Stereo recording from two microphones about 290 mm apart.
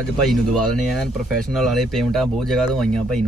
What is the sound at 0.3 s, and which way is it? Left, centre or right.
Speech, centre.